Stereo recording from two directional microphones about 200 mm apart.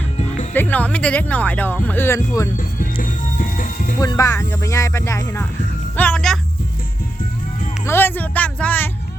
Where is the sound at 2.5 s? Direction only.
40° left (ahead or behind).